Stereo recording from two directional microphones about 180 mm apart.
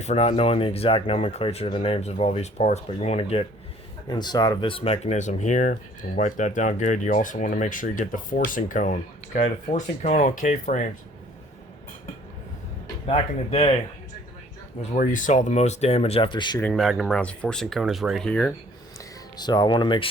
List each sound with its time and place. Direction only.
0.0 s speech: 35° left (ahead or behind)
4.1 s speech: 25° left (ahead or behind); by 10.8 s 45° left (ahead or behind)
13.1 s speech: 35° left (ahead or behind)
14.9 s speech: 45° left (ahead or behind); by 16.6 s 25° left (ahead or behind)
16.6 s speech: 5° left (ahead or behind)
19.4 s speech: 25° left (ahead or behind)